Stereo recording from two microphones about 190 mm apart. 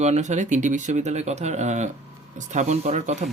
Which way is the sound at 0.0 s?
35° right (ahead or behind).